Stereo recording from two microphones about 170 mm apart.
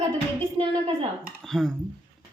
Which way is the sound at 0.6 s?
30° right (ahead or behind).